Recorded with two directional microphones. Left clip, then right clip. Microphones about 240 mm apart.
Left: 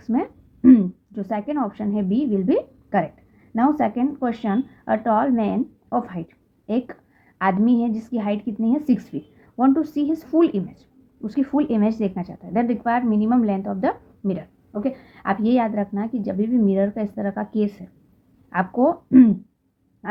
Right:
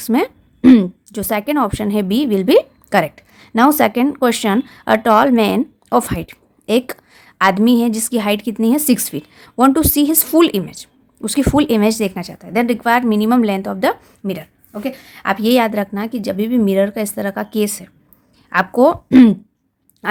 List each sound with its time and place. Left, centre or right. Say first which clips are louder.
0.0 s a woman's voice: right 8 dB; right